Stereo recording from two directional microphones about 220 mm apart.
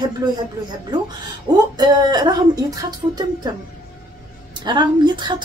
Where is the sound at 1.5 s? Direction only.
20° right (ahead or behind).